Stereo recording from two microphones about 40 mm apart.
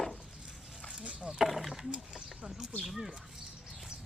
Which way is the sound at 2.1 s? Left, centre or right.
Centre.